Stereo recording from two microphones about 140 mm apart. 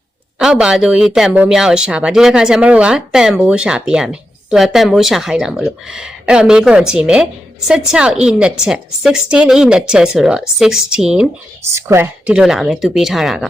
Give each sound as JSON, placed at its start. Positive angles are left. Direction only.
{"t": 0.3, "sound": "speech", "side_deg": -5}
{"t": 11.7, "sound": "speech", "side_deg": -20}
{"t": 12.2, "sound": "speech", "side_deg": -5}